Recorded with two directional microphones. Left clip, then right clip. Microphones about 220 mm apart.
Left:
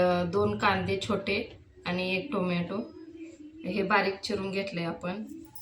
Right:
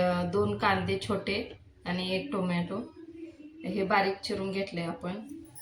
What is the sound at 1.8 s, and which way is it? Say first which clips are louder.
Speech: left 2 dB; 5° left (ahead or behind).